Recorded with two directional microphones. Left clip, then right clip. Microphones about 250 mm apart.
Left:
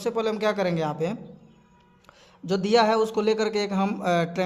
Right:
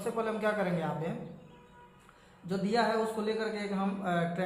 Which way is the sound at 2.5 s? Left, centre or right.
Left.